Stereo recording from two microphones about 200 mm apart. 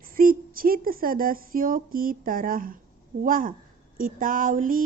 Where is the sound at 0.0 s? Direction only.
45° right (ahead or behind).